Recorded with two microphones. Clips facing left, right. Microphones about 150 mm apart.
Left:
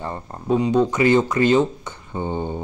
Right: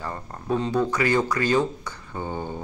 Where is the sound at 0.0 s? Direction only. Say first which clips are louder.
Left 4 dB; 25° left (ahead or behind).